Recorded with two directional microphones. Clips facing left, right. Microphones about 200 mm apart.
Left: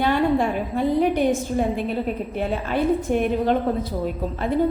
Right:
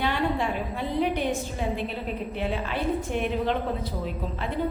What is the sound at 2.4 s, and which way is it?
A woman's voice, 45° left (ahead or behind).